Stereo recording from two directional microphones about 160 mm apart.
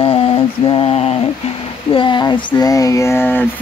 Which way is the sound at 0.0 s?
35° left (ahead or behind).